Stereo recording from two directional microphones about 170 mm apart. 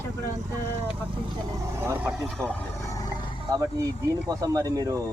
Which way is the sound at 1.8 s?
10° right (ahead or behind).